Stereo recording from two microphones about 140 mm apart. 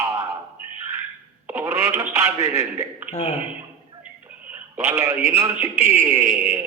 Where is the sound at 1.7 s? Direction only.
15° right (ahead or behind).